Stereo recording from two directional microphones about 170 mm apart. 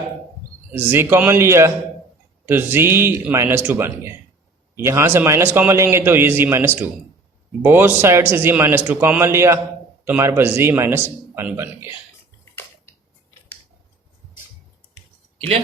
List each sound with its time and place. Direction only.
0.7 s a man's voice: 10° right (ahead or behind)
15.4 s speech: 35° right (ahead or behind)